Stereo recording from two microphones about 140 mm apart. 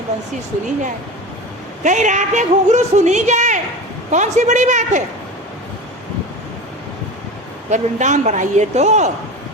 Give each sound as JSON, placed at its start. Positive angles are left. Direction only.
{"t": 1.8, "sound": "a woman's voice", "side_deg": -60}
{"t": 7.7, "sound": "a woman's voice", "side_deg": -60}